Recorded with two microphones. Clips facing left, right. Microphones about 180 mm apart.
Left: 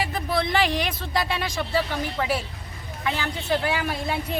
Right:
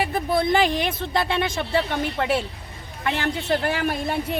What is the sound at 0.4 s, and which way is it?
A woman's voice, 50° right (ahead or behind).